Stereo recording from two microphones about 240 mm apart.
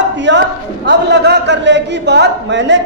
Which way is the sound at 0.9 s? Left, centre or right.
Right.